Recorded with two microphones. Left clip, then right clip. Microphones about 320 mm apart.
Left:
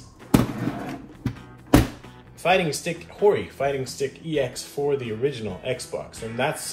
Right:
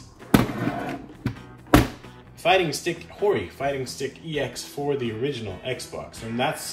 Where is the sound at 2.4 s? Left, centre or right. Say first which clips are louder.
Right 1 dB; right.